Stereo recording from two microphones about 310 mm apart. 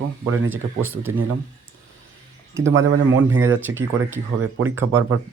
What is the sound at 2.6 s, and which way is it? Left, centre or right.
Speech, right.